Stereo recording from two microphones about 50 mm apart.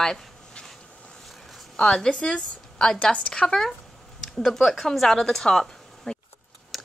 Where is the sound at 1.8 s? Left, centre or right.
Centre.